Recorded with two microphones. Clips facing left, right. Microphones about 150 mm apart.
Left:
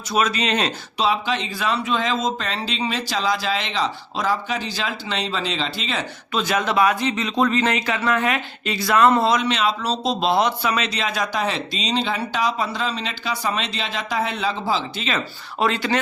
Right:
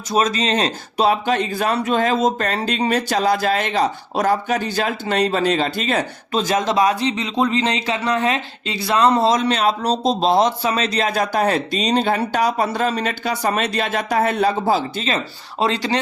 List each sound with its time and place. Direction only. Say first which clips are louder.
0.1 s speech: right 3 dB; 40° right (ahead or behind)
0.9 s speech: right 5 dB; 50° right (ahead or behind); by 9.2 s 20° right (ahead or behind)
9.2 s speech: right 3 dB; 35° right (ahead or behind)
15.6 s speech: right 1 dB; 35° right (ahead or behind)